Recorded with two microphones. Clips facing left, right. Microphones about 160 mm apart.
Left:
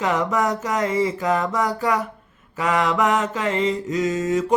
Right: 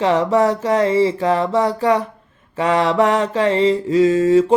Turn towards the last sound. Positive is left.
turn(degrees=-30)  # may be behind; listen again after turning